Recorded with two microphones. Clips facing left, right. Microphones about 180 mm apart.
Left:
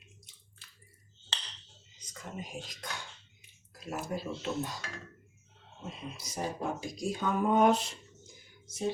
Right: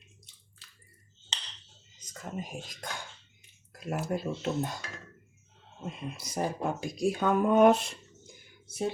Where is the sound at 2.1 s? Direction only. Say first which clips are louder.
Right 3 dB; 45° right (ahead or behind).